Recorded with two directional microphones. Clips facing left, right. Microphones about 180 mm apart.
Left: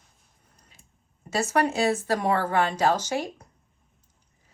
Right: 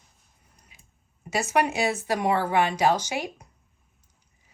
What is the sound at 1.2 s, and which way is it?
A woman's voice, 15° right (ahead or behind).